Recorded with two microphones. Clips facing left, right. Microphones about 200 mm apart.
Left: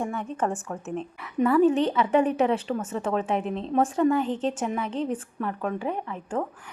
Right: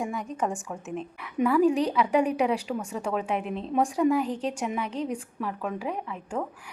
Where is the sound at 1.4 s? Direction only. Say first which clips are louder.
Left 2 dB; centre (ahead or behind).